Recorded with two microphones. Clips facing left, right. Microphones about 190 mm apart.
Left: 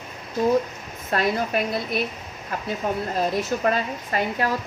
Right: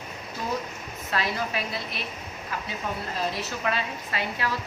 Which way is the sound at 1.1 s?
50° left (ahead or behind).